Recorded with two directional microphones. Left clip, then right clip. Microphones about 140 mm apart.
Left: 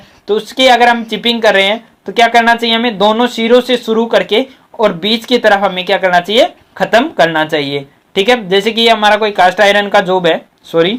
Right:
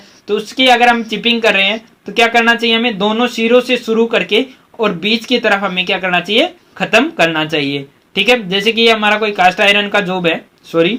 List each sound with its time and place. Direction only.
0.3 s speech: 35° left (ahead or behind)